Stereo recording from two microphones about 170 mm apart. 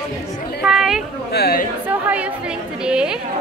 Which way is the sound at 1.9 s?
10° right (ahead or behind).